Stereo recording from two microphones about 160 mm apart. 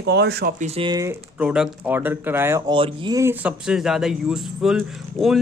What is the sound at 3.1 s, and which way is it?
Speech, 15° right (ahead or behind).